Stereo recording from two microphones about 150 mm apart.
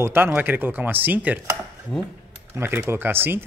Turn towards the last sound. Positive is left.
turn(degrees=-15)  # may be behind; listen again after turning